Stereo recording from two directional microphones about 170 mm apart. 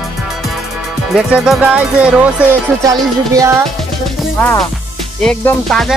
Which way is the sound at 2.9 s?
20° right (ahead or behind).